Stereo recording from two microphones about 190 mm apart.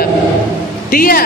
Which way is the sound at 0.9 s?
50° left (ahead or behind).